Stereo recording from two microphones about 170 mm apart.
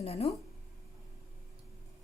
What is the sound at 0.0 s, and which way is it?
Speech, 35° left (ahead or behind).